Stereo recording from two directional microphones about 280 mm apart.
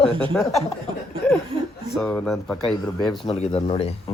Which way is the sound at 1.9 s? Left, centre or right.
Centre.